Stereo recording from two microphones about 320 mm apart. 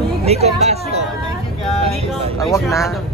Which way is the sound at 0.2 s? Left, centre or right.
Centre.